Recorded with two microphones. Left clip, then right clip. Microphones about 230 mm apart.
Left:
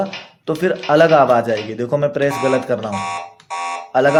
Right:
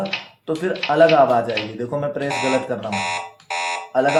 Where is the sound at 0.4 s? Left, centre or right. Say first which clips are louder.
Left 4 dB; left.